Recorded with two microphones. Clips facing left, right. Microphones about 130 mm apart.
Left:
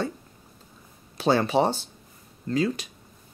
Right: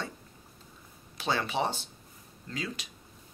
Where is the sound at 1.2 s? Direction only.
40° left (ahead or behind).